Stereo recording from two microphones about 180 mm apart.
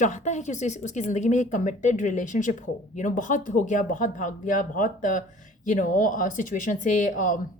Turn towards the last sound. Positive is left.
turn(degrees=50)  # may be behind; listen again after turning